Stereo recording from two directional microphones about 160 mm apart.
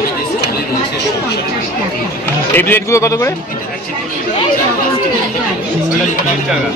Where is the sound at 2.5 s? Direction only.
15° left (ahead or behind).